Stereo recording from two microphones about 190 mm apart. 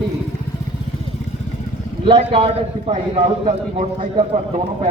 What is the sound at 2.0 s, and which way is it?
A man's voice, 30° right (ahead or behind).